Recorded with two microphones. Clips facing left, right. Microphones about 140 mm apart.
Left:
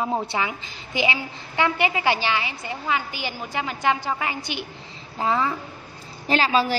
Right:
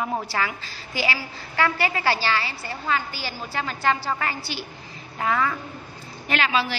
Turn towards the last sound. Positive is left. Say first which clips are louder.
# left 3 dB
turn(degrees=40)  # may be behind; listen again after turning